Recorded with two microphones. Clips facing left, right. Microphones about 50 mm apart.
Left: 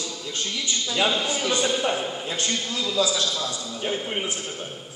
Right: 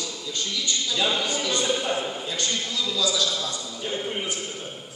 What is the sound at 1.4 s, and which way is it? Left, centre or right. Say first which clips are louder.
A man's voice: left 2 dB; left.